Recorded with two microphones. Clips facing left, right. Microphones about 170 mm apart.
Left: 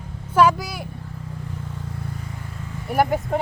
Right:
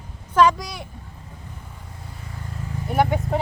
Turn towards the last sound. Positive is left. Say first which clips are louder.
# left 1 dB
turn(degrees=5)  # may be behind; listen again after turning